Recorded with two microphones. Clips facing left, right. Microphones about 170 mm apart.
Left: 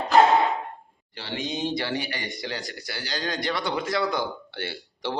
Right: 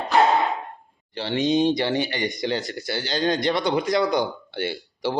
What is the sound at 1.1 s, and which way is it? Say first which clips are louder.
Speech: right 10 dB; 25° right (ahead or behind).